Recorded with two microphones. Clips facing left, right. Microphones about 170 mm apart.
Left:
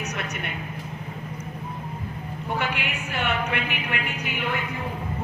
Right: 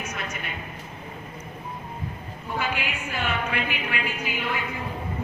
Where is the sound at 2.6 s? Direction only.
70° left (ahead or behind).